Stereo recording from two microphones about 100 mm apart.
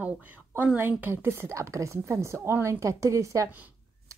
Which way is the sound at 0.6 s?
20° right (ahead or behind).